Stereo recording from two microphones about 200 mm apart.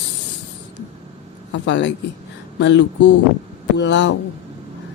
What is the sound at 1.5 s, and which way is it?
A woman's voice, 65° left (ahead or behind).